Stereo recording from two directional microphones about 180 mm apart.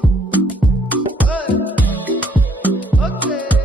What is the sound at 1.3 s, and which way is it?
Music, 10° left (ahead or behind).